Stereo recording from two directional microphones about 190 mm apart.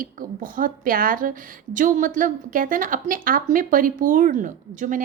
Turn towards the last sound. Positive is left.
turn(degrees=-40)  # may be behind; listen again after turning